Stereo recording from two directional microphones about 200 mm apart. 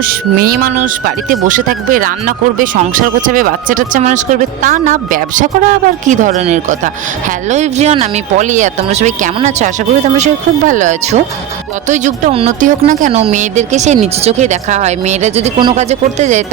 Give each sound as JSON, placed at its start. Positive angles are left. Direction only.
{"t": 0.0, "sound": "speech", "side_deg": -45}